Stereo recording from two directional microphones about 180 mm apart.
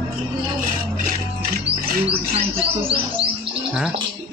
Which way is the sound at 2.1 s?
30° right (ahead or behind).